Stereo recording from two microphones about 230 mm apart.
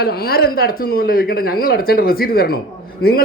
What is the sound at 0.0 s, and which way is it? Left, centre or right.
A man's voice, left.